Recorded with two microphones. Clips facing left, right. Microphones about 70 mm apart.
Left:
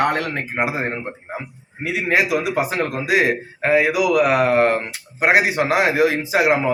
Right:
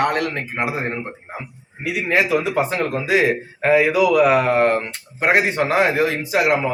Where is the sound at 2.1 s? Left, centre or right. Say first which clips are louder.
Right 1 dB; centre.